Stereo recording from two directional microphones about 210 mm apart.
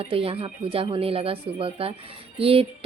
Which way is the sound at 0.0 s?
25° right (ahead or behind).